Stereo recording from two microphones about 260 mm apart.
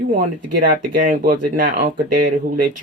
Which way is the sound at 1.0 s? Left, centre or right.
Right.